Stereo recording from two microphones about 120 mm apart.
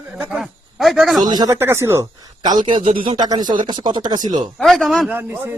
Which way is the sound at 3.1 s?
35° right (ahead or behind).